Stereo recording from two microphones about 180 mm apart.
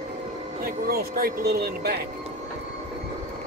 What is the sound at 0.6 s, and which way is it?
Speech, 55° right (ahead or behind).